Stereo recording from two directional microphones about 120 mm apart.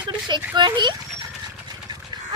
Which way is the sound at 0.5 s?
40° right (ahead or behind).